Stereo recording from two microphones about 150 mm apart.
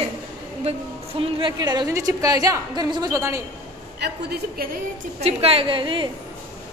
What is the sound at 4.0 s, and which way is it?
Speech, 90° right.